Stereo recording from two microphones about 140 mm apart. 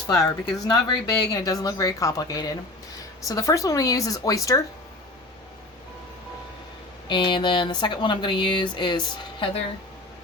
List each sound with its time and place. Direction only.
0.2 s speech: 25° left (ahead or behind)
7.1 s speech: 35° left (ahead or behind)